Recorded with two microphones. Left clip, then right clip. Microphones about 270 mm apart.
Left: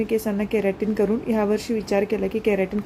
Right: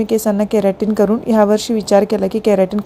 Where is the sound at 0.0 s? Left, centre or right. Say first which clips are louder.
Right 8 dB; right.